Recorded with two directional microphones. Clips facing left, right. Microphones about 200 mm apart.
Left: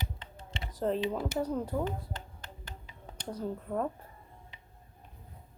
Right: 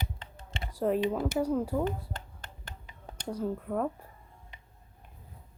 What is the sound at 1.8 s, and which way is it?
Finger snapping, 50° right (ahead or behind).